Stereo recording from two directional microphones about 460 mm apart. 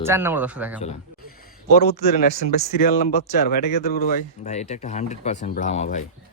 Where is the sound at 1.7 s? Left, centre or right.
Centre.